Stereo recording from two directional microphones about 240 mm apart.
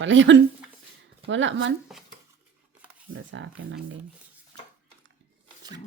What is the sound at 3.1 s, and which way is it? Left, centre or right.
Speech, right.